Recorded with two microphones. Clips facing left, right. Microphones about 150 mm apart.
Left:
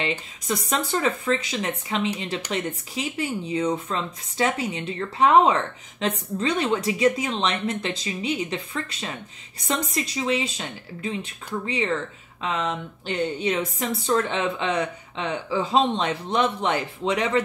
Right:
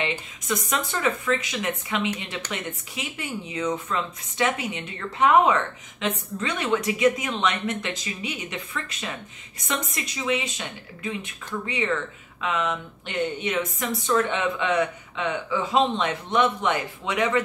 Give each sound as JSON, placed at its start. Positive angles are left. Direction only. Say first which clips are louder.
{"t": 0.0, "sound": "speech", "louder": "left 1 dB", "side_deg": 30}